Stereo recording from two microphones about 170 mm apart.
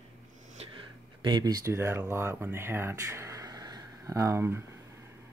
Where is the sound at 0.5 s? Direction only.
30° right (ahead or behind); by 4.6 s 15° right (ahead or behind).